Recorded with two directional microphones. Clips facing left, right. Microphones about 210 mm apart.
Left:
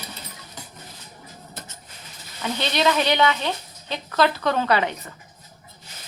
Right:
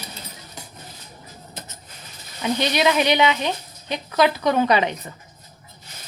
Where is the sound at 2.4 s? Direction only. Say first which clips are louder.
Right 2 dB; 15° right (ahead or behind).